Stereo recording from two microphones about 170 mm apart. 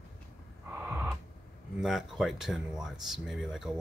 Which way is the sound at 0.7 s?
10° right (ahead or behind).